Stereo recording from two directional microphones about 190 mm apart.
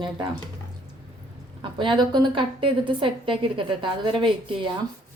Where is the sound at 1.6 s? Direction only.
25° right (ahead or behind).